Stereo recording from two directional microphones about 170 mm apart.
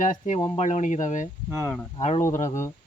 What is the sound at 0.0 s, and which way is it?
Speech, 50° left (ahead or behind).